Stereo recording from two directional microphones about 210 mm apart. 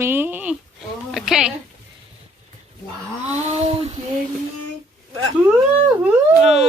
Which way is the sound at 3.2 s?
30° right (ahead or behind).